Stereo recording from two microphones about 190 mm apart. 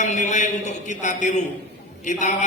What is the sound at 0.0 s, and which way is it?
A man's voice, 40° left (ahead or behind).